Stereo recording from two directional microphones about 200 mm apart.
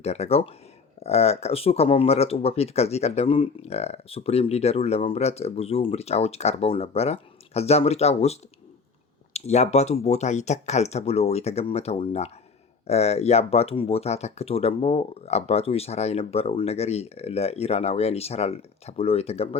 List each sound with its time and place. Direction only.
0.0 s speech: 30° left (ahead or behind)